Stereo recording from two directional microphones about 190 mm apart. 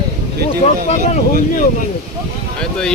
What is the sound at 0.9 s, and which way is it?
Speech, 35° left (ahead or behind).